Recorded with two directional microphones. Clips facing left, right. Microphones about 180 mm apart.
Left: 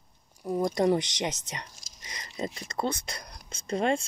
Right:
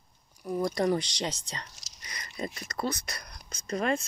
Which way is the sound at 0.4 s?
25° left (ahead or behind).